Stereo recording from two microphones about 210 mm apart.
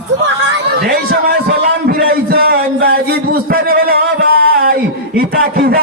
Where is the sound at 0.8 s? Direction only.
45° right (ahead or behind).